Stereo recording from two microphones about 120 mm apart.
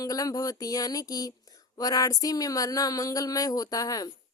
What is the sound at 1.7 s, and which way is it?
Speech, 30° left (ahead or behind).